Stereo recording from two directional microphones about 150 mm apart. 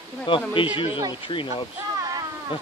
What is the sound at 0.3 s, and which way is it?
Speech, 35° left (ahead or behind).